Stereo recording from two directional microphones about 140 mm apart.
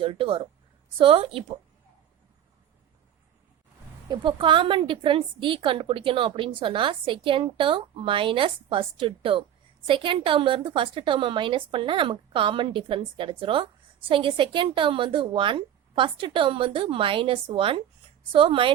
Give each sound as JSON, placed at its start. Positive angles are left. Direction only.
{"t": 0.0, "sound": "a woman's voice", "side_deg": -40}
{"t": 4.1, "sound": "a woman's voice", "side_deg": -35}